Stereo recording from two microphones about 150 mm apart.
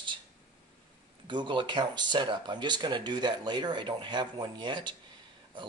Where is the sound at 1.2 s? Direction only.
30° right (ahead or behind).